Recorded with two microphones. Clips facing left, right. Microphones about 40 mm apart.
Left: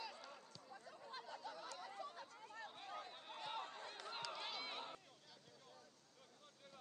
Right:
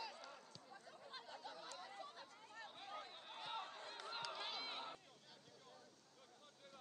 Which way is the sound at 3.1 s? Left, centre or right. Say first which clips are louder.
Left 1 dB; centre.